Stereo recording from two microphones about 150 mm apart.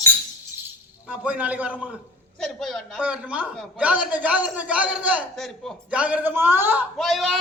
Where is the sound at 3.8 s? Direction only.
10° right (ahead or behind).